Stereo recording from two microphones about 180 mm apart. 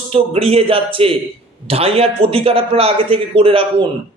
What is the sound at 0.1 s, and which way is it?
A man's voice, 35° right (ahead or behind).